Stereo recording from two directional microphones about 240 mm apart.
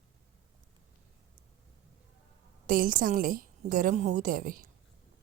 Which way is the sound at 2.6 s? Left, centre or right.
Right.